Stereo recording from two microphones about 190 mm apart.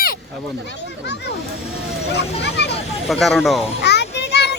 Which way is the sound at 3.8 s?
60° left (ahead or behind).